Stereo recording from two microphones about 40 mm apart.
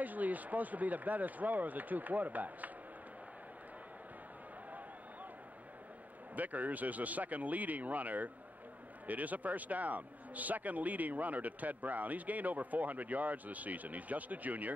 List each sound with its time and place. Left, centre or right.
0.0 s a man's voice: right
6.3 s a man's voice: right